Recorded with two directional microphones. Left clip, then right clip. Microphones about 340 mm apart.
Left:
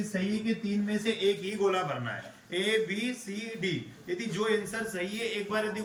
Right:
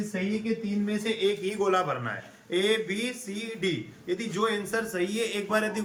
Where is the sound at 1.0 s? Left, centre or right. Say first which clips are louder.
Right 2 dB; centre.